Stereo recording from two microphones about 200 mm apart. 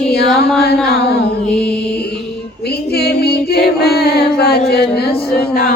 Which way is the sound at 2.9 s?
55° left (ahead or behind).